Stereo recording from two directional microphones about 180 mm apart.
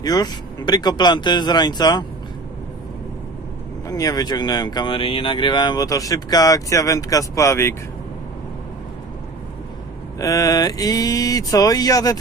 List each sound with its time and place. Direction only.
0.0 s speech: 20° left (ahead or behind)
3.8 s speech: 20° left (ahead or behind)
10.2 s speech: 20° left (ahead or behind)